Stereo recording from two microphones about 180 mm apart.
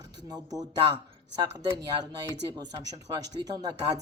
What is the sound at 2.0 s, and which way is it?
Speech, 20° right (ahead or behind).